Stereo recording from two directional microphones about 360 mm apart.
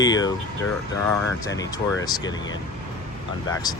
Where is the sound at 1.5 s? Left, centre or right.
Centre.